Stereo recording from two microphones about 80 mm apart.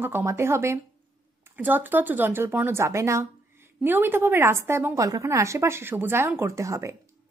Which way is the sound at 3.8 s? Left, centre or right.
Right.